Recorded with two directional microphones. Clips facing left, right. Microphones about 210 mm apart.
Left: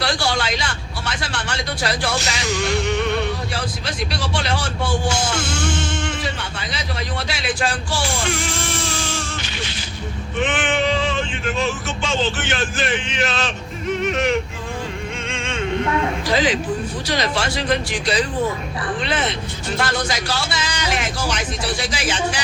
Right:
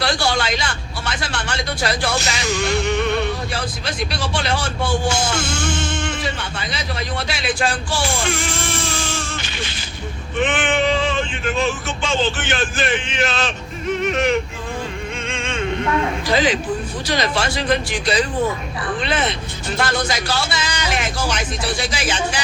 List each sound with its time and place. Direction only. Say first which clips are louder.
0.0 s vehicle: right 1 dB; 50° right (ahead or behind)
3.5 s speech: right 1 dB; 50° right (ahead or behind)
4.9 s speech: right 1 dB; 25° right (ahead or behind)
6.1 s a sound: right 1 dB; 50° right (ahead or behind)
10.4 s speech: right 2 dB; 55° right (ahead or behind)
17.1 s speech: right 2 dB; 55° right (ahead or behind)